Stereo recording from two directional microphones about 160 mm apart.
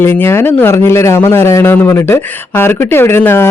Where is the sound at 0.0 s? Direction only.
15° left (ahead or behind).